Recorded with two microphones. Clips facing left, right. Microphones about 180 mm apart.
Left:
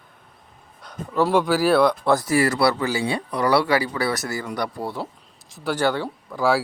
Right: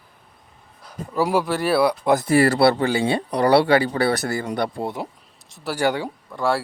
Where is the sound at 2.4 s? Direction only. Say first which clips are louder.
Right 3 dB; 30° right (ahead or behind).